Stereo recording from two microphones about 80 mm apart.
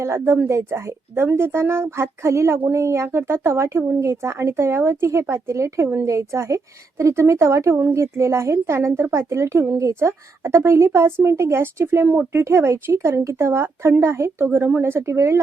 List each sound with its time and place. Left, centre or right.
0.0 s speech: right